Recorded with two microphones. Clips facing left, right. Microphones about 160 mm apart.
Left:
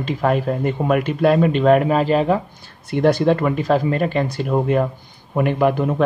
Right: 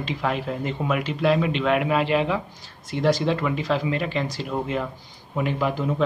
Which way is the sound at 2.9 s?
60° left (ahead or behind).